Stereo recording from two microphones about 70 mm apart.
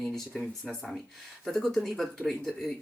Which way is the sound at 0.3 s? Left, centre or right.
Centre.